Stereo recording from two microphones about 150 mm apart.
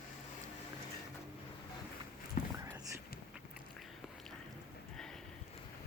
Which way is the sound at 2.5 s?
20° right (ahead or behind).